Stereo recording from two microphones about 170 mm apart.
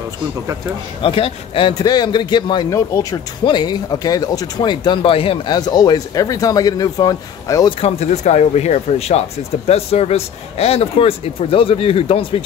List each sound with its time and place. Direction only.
1.0 s speech: 30° left (ahead or behind)
7.8 s speech: 40° left (ahead or behind)